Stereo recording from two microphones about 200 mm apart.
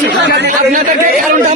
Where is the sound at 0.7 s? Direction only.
40° right (ahead or behind).